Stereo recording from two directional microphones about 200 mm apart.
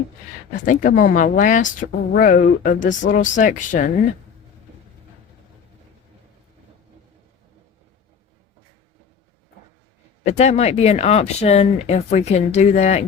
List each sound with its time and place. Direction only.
0.6 s speech: 40° left (ahead or behind)
10.2 s speech: 35° left (ahead or behind)